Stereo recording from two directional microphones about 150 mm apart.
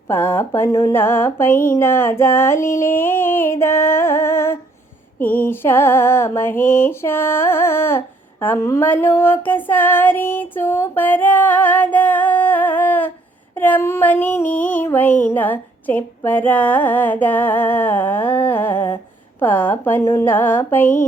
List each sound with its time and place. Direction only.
0.1 s music: 15° left (ahead or behind)